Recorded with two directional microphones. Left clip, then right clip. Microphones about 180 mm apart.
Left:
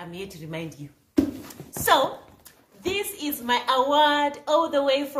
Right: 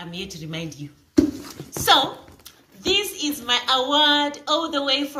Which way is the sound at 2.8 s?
25° left (ahead or behind).